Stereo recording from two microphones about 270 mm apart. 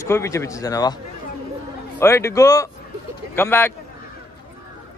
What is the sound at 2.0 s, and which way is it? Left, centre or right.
Speech, centre.